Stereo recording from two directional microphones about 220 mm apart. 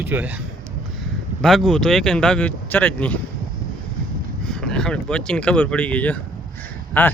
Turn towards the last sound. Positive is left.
turn(degrees=10)  # may be behind; listen again after turning